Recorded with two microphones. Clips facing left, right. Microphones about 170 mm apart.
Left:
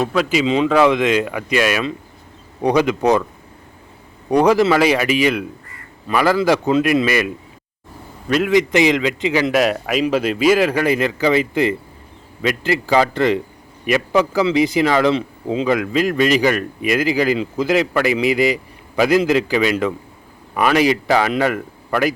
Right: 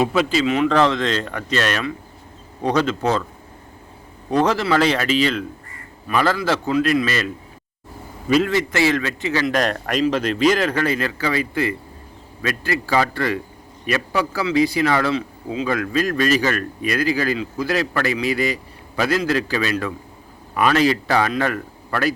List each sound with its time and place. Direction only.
0.0 s speech: 5° right (ahead or behind)
0.3 s speech: 15° left (ahead or behind)
4.3 s a man's voice: 15° left (ahead or behind)
15.7 s speech: 15° left (ahead or behind)